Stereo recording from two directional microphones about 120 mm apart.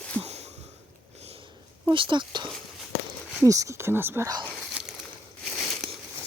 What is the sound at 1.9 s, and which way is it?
Speech, 45° right (ahead or behind).